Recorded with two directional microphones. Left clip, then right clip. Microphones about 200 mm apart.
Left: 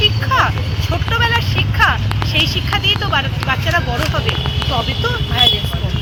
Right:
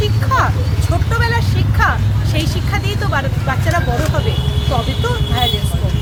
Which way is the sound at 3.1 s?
20° right (ahead or behind).